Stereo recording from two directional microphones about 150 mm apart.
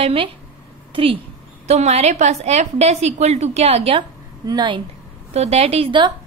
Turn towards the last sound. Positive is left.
turn(degrees=-30)  # may be behind; listen again after turning